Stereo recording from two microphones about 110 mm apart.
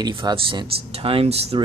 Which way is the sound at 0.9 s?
55° right (ahead or behind).